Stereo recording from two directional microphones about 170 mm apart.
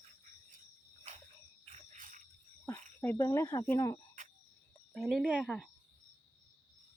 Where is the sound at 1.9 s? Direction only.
50° right (ahead or behind).